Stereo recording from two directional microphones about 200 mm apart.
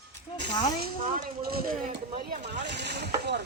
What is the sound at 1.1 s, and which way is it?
Speech, 45° right (ahead or behind).